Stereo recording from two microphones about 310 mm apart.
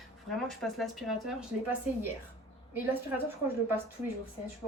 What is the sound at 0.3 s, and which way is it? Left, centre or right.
Speech, centre.